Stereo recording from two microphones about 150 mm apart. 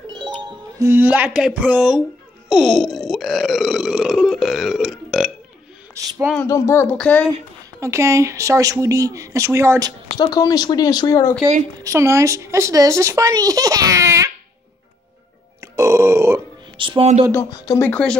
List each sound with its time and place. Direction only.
0.4 s music: 30° right (ahead or behind)
0.8 s a sound: 10° right (ahead or behind)
2.5 s burping: centre (ahead or behind)
6.0 s a woman's voice: 20° right (ahead or behind)
6.4 s speech: 20° left (ahead or behind)
7.8 s a woman's voice: 20° right (ahead or behind)
10.3 s speech: 25° left (ahead or behind)
11.8 s a woman's voice: 20° right (ahead or behind)
15.6 s grunt: 20° right (ahead or behind)
16.7 s music: 35° right (ahead or behind)
17.5 s speech: 25° left (ahead or behind)
17.8 s speech: 10° left (ahead or behind)